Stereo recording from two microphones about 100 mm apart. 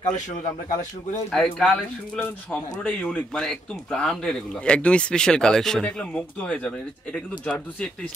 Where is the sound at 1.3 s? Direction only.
10° left (ahead or behind).